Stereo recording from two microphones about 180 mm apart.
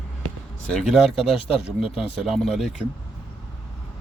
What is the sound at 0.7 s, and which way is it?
Speech, centre (ahead or behind).